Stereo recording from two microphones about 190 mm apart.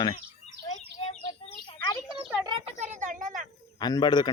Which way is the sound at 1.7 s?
20° left (ahead or behind).